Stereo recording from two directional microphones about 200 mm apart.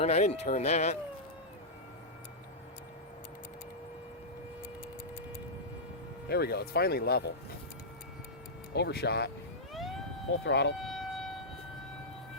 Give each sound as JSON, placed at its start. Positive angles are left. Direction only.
{"t": 0.0, "sound": "speech", "side_deg": 35}
{"t": 6.2, "sound": "speech", "side_deg": 55}
{"t": 8.7, "sound": "speech", "side_deg": 55}
{"t": 9.7, "sound": "vehicle", "side_deg": 0}
{"t": 10.4, "sound": "speech", "side_deg": 55}
{"t": 10.8, "sound": "siren", "side_deg": 0}